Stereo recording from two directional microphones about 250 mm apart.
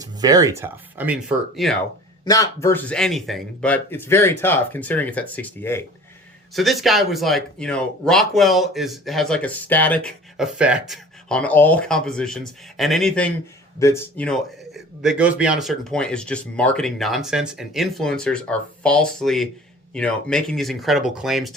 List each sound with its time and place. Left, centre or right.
0.0 s speech: centre
2.2 s speech: centre